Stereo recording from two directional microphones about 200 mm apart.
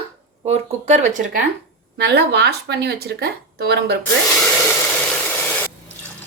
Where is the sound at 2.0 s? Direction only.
55° right (ahead or behind).